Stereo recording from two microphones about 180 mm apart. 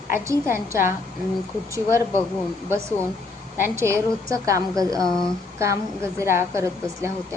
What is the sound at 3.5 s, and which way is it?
A woman's voice, 15° right (ahead or behind).